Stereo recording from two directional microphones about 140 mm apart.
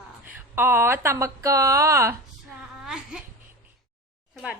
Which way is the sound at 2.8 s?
5° right (ahead or behind).